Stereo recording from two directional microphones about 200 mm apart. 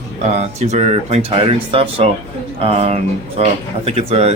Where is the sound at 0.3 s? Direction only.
35° right (ahead or behind).